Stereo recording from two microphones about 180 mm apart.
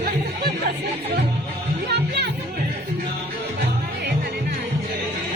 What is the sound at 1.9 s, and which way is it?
Music, 70° right (ahead or behind).